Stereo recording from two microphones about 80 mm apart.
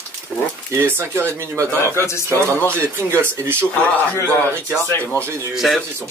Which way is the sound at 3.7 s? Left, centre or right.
Centre.